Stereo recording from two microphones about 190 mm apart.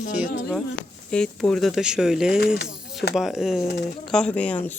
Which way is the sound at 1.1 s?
5° left (ahead or behind).